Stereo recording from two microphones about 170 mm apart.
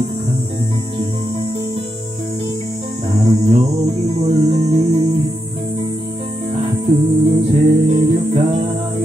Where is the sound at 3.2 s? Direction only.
30° right (ahead or behind).